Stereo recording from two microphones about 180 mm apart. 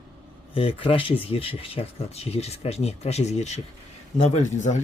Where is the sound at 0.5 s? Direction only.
30° left (ahead or behind).